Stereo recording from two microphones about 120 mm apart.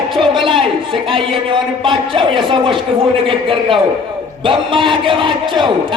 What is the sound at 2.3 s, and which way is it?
A man's voice, 45° right (ahead or behind).